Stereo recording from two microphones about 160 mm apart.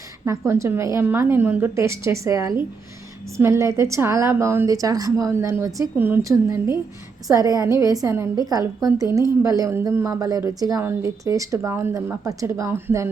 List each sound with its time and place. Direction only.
0.3 s a woman's voice: 15° right (ahead or behind)